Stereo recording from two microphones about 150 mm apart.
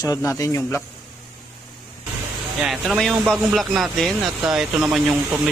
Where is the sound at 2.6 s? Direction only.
Centre (ahead or behind).